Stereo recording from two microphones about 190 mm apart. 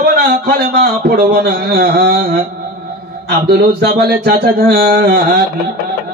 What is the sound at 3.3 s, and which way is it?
A man's voice, 60° right (ahead or behind).